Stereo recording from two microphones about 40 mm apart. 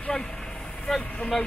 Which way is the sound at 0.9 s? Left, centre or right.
Centre.